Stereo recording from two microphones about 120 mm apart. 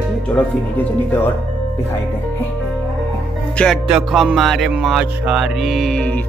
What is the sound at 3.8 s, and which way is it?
Music, 5° right (ahead or behind).